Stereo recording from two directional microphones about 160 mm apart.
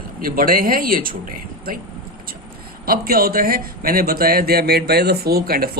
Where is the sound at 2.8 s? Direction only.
70° right (ahead or behind).